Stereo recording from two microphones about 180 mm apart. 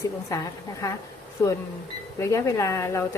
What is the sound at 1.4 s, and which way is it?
A woman's voice, 10° left (ahead or behind).